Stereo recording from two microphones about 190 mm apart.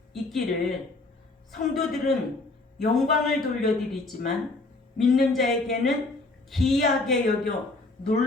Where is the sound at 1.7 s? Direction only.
Centre (ahead or behind).